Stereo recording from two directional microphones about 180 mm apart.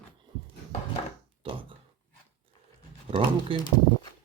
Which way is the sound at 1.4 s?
30° right (ahead or behind).